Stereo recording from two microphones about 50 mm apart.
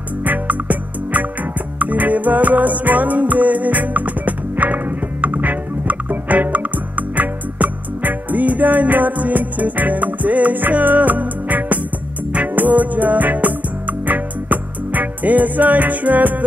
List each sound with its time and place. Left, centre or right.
0.2 s music: right